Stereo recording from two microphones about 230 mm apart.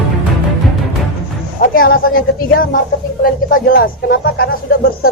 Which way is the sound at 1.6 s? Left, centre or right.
Left.